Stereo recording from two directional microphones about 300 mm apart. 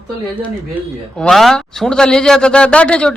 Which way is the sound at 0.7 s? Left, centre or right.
Centre.